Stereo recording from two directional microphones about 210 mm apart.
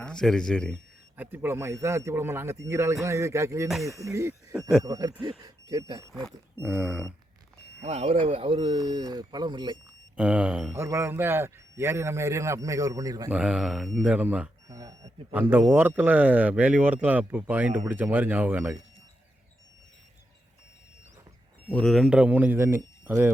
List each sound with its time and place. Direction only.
0.0 s speech: 5° left (ahead or behind)
1.1 s speech: 10° right (ahead or behind)
3.7 s speech: centre (ahead or behind)
4.0 s speech: 15° right (ahead or behind)
7.8 s a man's voice: 30° right (ahead or behind)
10.2 s speech: 5° right (ahead or behind)
13.3 s speech: 5° right (ahead or behind)
21.7 s speech: 5° left (ahead or behind)